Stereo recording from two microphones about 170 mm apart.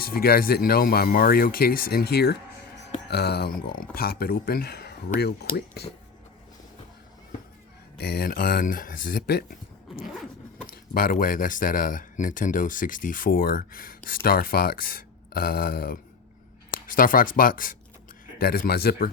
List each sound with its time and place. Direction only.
0.0 s speech: 60° left (ahead or behind)
7.9 s speech: 65° left (ahead or behind)
10.7 s speech: 55° left (ahead or behind)